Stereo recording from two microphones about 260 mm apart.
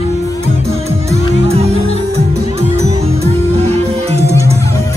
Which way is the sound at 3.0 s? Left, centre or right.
Right.